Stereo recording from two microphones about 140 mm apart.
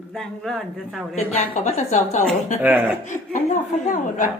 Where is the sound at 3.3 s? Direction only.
60° left (ahead or behind).